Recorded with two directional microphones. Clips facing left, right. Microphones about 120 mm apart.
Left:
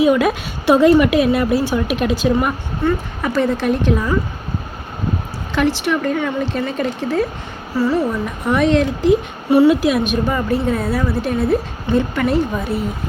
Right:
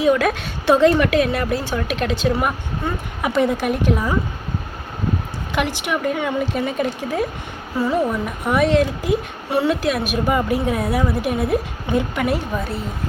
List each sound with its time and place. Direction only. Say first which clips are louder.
0.0 s a woman's voice: left 3 dB; 5° left (ahead or behind)
2.8 s a woman's voice: left 6 dB; 15° right (ahead or behind)
5.5 s a woman's voice: left 5 dB; 15° right (ahead or behind)